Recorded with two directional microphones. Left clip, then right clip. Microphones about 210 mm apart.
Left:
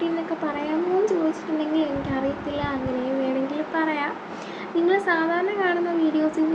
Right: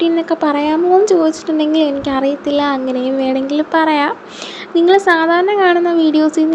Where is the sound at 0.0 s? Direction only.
50° right (ahead or behind).